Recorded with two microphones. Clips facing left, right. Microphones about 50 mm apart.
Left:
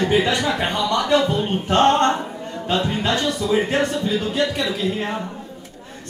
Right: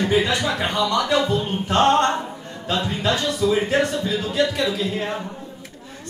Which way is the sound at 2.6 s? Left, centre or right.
Centre.